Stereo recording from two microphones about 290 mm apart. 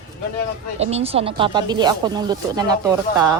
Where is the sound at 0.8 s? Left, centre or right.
Right.